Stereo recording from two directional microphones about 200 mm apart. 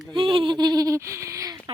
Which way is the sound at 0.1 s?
25° right (ahead or behind).